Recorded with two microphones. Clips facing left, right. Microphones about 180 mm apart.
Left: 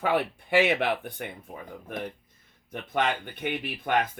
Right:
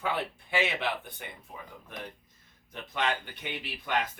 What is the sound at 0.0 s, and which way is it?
Speech, 60° left (ahead or behind).